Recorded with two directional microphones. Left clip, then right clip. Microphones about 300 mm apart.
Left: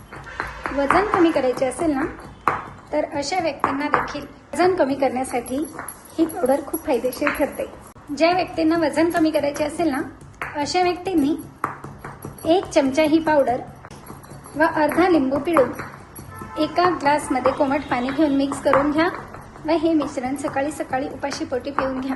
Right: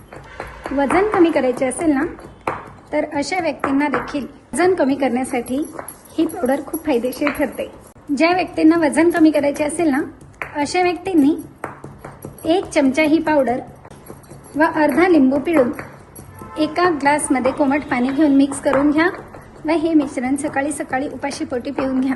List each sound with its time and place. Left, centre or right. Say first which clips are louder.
0.8 s speech: right 2 dB; right
12.5 s speech: right 1 dB; right
14.6 s speech: right 3 dB; right
16.6 s speech: right 2 dB; right